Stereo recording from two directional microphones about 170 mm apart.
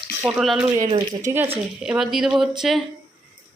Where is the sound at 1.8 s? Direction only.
5° right (ahead or behind).